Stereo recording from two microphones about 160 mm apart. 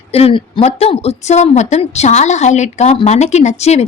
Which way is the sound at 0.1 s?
40° left (ahead or behind).